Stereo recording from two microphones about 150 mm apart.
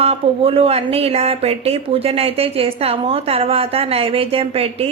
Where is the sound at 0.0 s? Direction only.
40° right (ahead or behind).